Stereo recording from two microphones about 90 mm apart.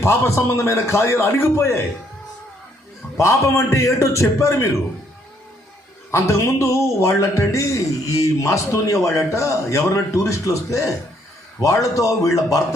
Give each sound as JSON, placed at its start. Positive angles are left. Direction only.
{"t": 0.0, "sound": "speech", "side_deg": 30}
{"t": 3.2, "sound": "speech", "side_deg": 35}
{"t": 6.1, "sound": "speech", "side_deg": 35}